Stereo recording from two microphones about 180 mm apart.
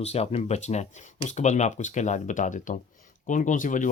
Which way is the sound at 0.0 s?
35° left (ahead or behind).